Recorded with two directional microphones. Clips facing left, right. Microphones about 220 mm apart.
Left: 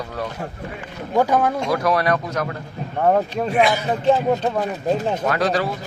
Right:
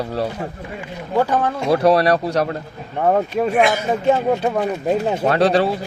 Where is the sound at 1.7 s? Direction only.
30° right (ahead or behind).